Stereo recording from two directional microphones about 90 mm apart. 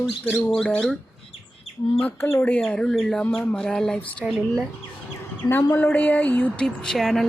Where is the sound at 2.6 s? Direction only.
5° left (ahead or behind).